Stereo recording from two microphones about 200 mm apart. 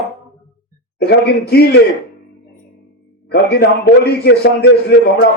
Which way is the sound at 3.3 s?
50° left (ahead or behind).